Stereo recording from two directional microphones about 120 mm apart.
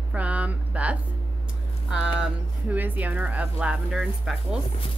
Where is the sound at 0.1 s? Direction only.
10° right (ahead or behind).